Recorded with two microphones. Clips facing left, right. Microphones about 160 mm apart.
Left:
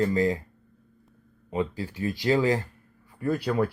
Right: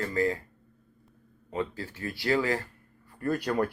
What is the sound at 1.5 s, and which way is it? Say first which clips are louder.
Speech: left 4 dB; 15° left (ahead or behind).